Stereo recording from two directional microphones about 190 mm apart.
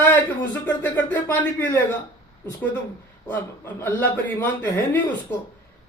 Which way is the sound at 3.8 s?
10° left (ahead or behind).